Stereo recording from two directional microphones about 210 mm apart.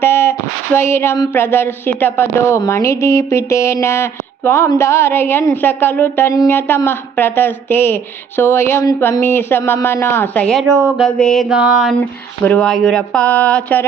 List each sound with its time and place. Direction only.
0.0 s speech: 10° left (ahead or behind)